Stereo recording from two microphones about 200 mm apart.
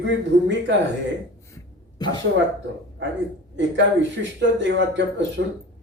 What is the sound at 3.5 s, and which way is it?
Speech, 65° right (ahead or behind).